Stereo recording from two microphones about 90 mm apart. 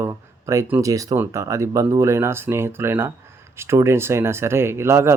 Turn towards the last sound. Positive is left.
turn(degrees=-30)  # may be behind; listen again after turning